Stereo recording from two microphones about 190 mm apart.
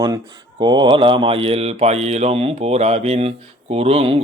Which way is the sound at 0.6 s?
25° right (ahead or behind).